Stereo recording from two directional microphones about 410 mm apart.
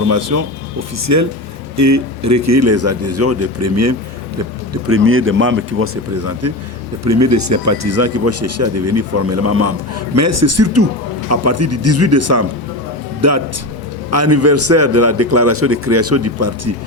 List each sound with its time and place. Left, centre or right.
0.1 s speech: right